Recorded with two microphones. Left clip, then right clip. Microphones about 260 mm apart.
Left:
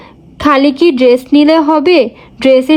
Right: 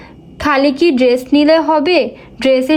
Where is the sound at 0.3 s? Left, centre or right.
Left.